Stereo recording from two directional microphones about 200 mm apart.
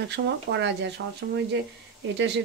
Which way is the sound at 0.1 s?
60° right (ahead or behind).